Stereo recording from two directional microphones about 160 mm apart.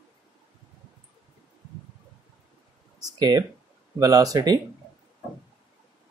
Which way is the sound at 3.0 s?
25° right (ahead or behind).